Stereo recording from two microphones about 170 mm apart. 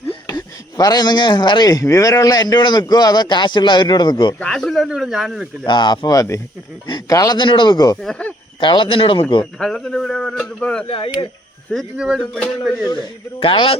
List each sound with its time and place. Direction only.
0.1 s speech: 25° left (ahead or behind)
4.4 s a man's voice: 5° left (ahead or behind)
5.6 s a man's voice: 25° left (ahead or behind)
9.4 s a man's voice: 5° left (ahead or behind)
10.8 s a man's voice: 35° left (ahead or behind)
11.7 s a man's voice: centre (ahead or behind)
13.4 s a man's voice: 30° left (ahead or behind)